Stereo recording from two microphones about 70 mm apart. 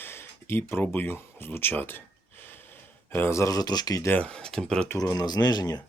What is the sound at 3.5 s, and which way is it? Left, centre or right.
Speech, left.